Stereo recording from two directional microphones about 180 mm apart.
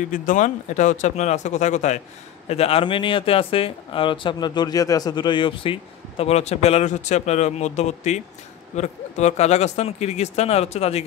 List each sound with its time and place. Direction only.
0.1 s speech: 45° left (ahead or behind)